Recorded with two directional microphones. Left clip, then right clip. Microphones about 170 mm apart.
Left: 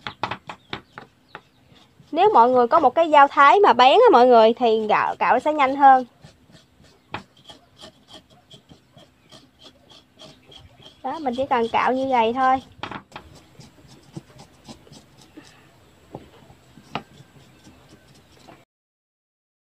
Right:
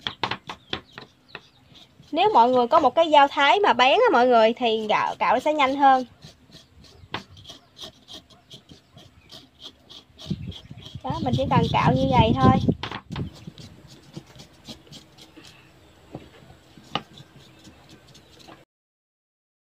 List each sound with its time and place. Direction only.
0.0 s a sound: 15° left (ahead or behind)
2.1 s a woman's voice: 30° left (ahead or behind)
7.2 s rub: 20° left (ahead or behind)
9.6 s wood: 25° left (ahead or behind)
11.0 s a woman's voice: 35° left (ahead or behind)